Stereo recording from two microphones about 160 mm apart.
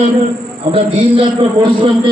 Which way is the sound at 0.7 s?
35° right (ahead or behind).